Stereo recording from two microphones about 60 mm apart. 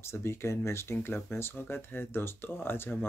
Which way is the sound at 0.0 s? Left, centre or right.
Left.